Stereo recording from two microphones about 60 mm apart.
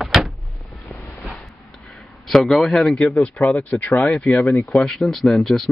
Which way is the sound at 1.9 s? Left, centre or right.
Centre.